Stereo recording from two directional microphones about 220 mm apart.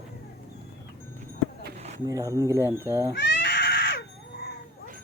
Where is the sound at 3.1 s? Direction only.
55° left (ahead or behind).